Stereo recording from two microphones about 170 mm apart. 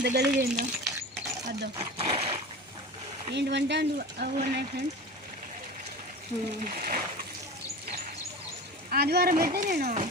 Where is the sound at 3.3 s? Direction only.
90° right.